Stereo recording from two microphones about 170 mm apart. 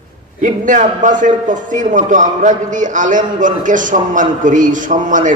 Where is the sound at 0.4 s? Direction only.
50° right (ahead or behind).